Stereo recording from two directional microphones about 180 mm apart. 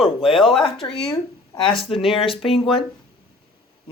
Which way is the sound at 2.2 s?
30° left (ahead or behind).